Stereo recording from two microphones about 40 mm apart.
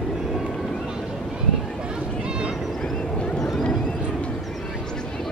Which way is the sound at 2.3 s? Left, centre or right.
Right.